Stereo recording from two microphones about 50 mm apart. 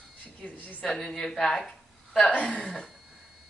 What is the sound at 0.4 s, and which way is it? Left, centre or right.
Speech, left.